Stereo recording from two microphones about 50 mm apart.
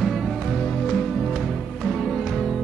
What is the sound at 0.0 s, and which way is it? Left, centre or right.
Music, centre.